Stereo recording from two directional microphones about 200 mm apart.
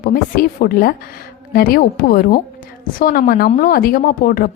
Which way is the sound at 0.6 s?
45° left (ahead or behind).